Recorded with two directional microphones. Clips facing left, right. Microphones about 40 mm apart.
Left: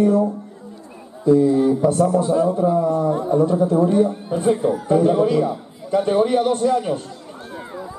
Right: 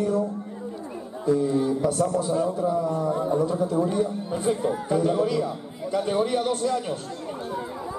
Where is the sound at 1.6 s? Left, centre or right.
Left.